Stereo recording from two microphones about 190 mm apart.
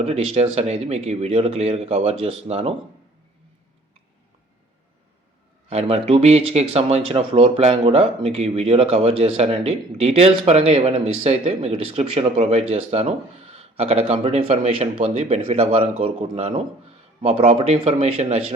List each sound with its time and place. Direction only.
0.0 s speech: 30° right (ahead or behind)
5.6 s a man's voice: 30° right (ahead or behind)